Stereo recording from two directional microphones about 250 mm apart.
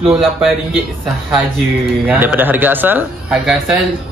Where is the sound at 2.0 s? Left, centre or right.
Centre.